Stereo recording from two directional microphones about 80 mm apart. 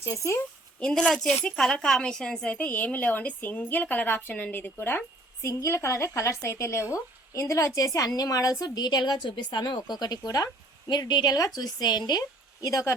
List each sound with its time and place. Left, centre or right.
0.0 s a woman's voice: left
0.8 s speech: centre; by 5.5 s left
5.5 s a woman's voice: left